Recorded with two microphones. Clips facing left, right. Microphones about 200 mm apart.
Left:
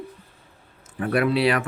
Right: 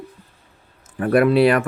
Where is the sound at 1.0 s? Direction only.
50° right (ahead or behind).